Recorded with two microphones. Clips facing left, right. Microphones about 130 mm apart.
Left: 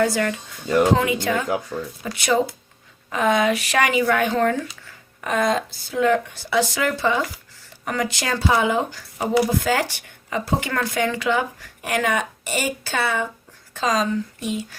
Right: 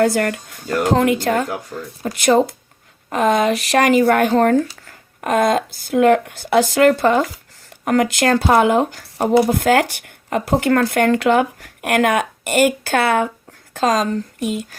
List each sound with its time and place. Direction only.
0.0 s speech: 55° right (ahead or behind)
1.7 s speech: 25° left (ahead or behind)
2.0 s speech: 45° right (ahead or behind)